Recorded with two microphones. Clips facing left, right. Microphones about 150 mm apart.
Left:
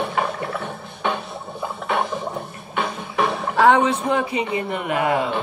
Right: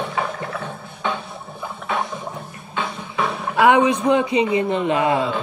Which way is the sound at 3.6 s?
15° right (ahead or behind).